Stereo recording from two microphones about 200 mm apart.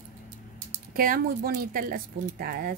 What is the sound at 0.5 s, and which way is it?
A woman's voice, 45° right (ahead or behind).